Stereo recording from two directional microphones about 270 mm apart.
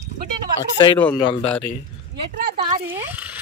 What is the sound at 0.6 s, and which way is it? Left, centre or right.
A man's voice, centre.